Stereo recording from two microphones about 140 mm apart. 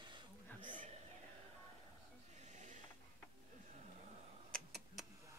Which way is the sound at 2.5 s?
60° right (ahead or behind).